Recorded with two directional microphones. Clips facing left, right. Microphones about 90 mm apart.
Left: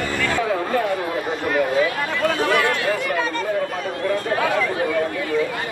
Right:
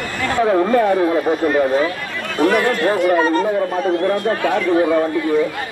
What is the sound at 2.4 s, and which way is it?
Speech, 40° right (ahead or behind).